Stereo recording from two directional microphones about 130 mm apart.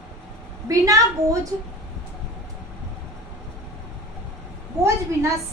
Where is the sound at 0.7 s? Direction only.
25° right (ahead or behind).